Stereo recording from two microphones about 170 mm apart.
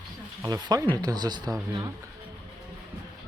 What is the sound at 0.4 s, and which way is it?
Speech, 20° right (ahead or behind).